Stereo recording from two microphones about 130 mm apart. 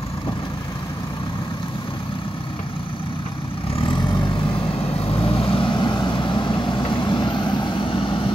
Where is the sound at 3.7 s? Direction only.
40° left (ahead or behind).